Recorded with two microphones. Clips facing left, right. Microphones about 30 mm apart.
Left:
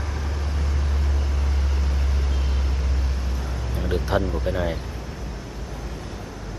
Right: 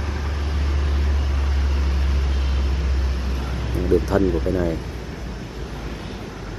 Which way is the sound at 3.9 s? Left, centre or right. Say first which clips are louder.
Right 6 dB; left.